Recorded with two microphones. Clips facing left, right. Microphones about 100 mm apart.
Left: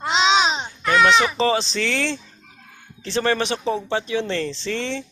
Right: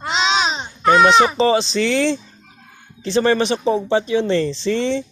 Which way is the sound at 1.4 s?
5° right (ahead or behind).